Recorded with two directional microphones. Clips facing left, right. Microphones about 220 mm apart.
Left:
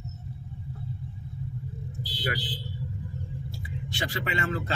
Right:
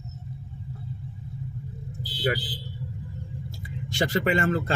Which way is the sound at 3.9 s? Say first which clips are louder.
Right 8 dB; 45° right (ahead or behind).